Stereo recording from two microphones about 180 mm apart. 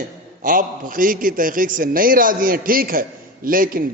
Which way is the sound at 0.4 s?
50° right (ahead or behind).